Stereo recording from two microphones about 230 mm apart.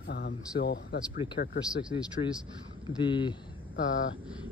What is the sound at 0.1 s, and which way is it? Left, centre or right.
Speech, left.